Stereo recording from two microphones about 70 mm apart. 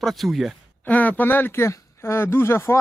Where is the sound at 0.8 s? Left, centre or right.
Left.